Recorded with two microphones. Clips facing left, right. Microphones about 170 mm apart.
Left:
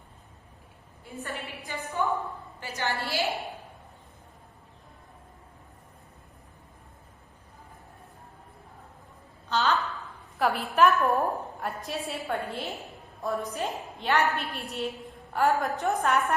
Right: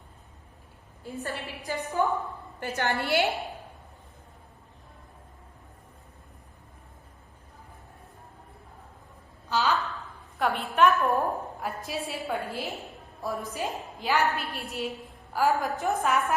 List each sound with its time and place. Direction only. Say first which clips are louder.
1.2 s a woman's voice: right 1 dB; 40° right (ahead or behind)
2.6 s a woman's voice: right 3 dB; 60° right (ahead or behind)
9.5 s a sound: even; centre (ahead or behind)
10.3 s a woman's voice: left 1 dB; centre (ahead or behind)